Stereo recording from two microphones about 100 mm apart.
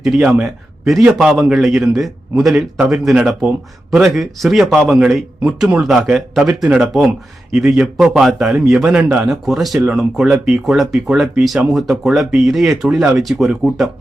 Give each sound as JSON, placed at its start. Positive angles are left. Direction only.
{"t": 0.0, "sound": "speech", "side_deg": -5}
{"t": 9.0, "sound": "speech", "side_deg": -15}
{"t": 9.2, "sound": "speech", "side_deg": 0}